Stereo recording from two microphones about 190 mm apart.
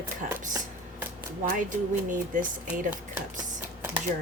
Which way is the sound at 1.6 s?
40° right (ahead or behind).